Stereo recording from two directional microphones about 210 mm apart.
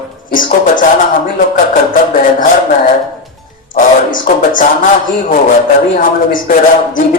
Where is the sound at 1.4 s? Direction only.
40° left (ahead or behind).